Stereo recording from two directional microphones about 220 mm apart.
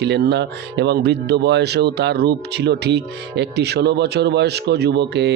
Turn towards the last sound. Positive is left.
turn(degrees=-50)  # may be behind; listen again after turning